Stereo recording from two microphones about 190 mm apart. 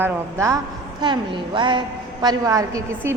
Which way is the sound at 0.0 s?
15° right (ahead or behind).